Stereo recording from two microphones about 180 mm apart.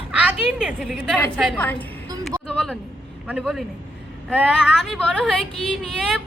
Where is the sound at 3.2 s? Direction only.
5° right (ahead or behind).